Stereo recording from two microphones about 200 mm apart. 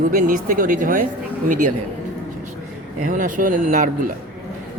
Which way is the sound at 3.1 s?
40° right (ahead or behind).